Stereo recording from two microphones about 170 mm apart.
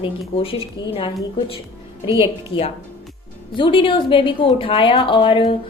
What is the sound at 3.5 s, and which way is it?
A woman's voice, 30° left (ahead or behind).